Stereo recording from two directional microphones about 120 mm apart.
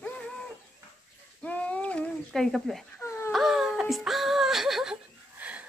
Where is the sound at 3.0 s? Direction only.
20° left (ahead or behind).